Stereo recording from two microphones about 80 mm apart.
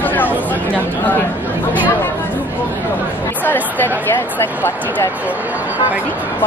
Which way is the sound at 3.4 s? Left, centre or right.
Left.